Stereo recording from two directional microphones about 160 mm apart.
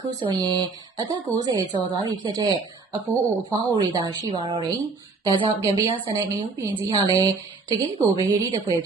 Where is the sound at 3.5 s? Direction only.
25° right (ahead or behind).